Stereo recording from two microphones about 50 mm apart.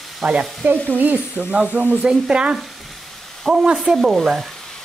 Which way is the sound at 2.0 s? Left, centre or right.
Centre.